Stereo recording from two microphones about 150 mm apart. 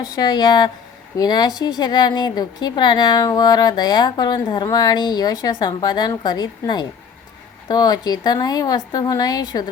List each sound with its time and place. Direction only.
0.0 s a woman's voice: 25° left (ahead or behind)